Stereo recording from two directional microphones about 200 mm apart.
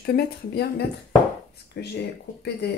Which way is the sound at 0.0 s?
55° left (ahead or behind).